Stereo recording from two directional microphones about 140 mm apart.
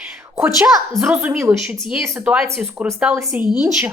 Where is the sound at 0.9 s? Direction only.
15° right (ahead or behind).